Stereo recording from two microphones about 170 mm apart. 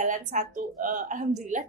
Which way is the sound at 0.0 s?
45° right (ahead or behind).